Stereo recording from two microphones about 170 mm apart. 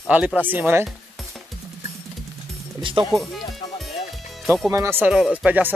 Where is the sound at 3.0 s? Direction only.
30° right (ahead or behind).